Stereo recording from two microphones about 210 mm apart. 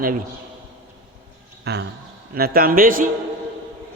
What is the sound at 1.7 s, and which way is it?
Speech, 50° right (ahead or behind).